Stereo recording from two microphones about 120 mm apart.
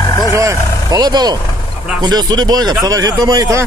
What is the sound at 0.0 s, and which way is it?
Vehicle, 30° left (ahead or behind).